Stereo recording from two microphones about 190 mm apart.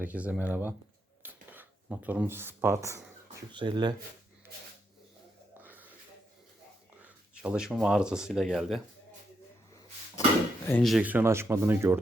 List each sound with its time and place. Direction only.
0.0 s speech: 10° right (ahead or behind)
3.5 s speech: 25° right (ahead or behind)
5.5 s a sound: 10° right (ahead or behind)
7.0 s speech: 5° right (ahead or behind)
10.7 s speech: 5° left (ahead or behind); by 11.9 s 10° right (ahead or behind)